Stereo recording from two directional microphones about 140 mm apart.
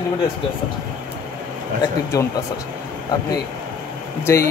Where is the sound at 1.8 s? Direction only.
20° left (ahead or behind).